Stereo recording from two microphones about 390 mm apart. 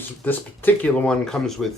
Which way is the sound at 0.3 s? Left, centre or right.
Centre.